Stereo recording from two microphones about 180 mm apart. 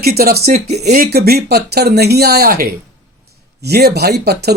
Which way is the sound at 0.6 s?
40° right (ahead or behind).